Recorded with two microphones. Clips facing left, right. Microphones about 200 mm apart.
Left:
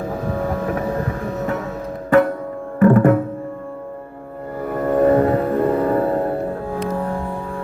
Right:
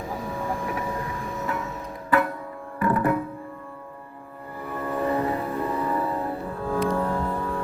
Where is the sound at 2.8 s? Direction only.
45° left (ahead or behind).